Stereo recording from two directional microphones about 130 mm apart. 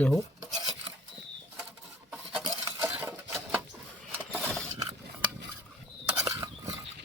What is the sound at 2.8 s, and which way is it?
Cutlery, 15° right (ahead or behind).